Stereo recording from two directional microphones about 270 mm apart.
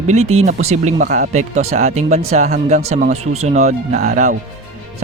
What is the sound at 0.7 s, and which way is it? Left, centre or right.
A man's voice, right.